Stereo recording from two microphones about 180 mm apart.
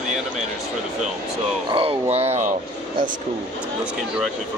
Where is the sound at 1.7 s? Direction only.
30° right (ahead or behind).